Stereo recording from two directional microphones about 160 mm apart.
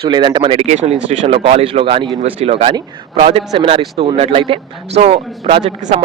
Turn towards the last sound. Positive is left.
turn(degrees=-35)  # may be behind; listen again after turning